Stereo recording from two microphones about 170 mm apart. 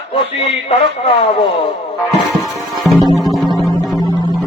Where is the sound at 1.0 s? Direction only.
30° left (ahead or behind).